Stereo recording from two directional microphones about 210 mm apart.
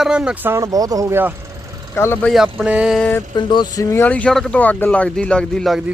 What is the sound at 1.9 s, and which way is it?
Speech, 10° left (ahead or behind).